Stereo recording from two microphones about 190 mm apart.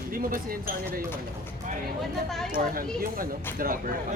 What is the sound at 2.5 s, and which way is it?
Speech, 50° right (ahead or behind).